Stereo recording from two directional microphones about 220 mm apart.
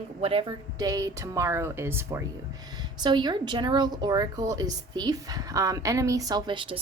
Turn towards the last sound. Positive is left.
turn(degrees=-25)  # may be behind; listen again after turning